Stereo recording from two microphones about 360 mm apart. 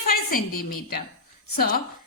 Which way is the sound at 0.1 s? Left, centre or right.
Left.